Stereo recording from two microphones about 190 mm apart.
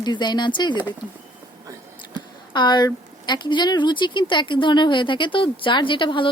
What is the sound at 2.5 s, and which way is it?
Speech, 25° left (ahead or behind).